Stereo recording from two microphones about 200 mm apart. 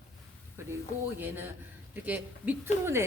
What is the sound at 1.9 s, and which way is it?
Speech, 10° right (ahead or behind).